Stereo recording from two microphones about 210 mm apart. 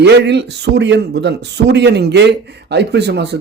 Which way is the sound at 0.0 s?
55° right (ahead or behind).